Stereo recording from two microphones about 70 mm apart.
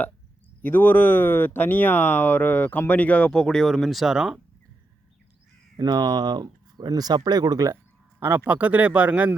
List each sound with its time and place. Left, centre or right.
0.6 s speech: left; by 4.4 s centre
5.7 s speech: right
8.4 s speech: right